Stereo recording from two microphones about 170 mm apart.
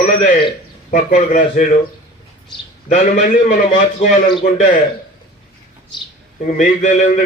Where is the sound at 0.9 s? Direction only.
45° left (ahead or behind).